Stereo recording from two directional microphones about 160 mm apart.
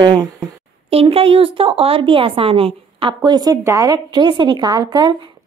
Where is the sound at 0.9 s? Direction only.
35° right (ahead or behind).